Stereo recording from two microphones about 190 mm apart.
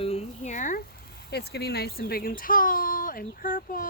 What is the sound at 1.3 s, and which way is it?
Speech, 60° left (ahead or behind).